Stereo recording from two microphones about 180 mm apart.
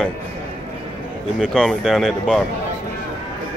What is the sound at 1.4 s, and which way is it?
Speech, 5° left (ahead or behind).